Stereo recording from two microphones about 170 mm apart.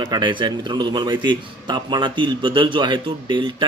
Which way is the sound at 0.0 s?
25° right (ahead or behind).